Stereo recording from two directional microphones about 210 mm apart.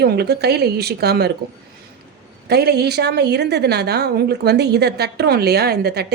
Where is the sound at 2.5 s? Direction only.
50° right (ahead or behind).